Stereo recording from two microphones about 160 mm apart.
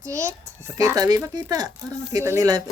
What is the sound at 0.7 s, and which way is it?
Speech, 20° right (ahead or behind).